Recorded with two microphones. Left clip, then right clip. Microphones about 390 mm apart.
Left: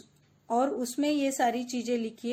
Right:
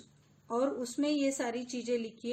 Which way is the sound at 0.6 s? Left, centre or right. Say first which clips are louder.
Left 1 dB; left.